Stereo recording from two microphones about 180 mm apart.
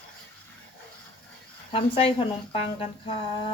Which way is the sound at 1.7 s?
30° left (ahead or behind).